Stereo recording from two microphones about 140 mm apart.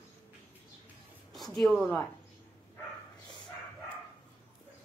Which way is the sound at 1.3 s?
Centre (ahead or behind).